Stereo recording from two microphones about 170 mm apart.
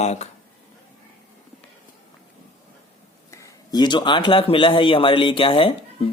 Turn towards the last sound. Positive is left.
turn(degrees=30)  # may be behind; listen again after turning